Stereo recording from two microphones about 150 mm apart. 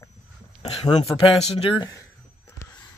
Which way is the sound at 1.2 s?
40° left (ahead or behind).